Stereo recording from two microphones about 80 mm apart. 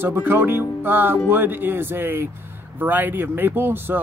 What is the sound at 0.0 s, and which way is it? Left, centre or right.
Speech, right.